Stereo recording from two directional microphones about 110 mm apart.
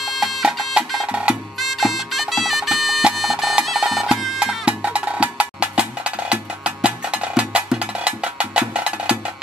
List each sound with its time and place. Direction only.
0.0 s music: centre (ahead or behind)